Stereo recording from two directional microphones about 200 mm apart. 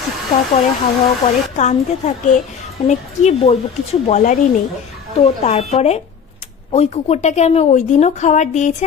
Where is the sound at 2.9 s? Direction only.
30° left (ahead or behind).